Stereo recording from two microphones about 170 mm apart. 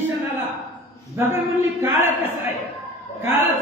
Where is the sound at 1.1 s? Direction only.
15° right (ahead or behind).